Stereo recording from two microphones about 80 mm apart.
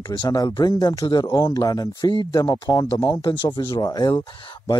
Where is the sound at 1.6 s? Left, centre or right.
Left.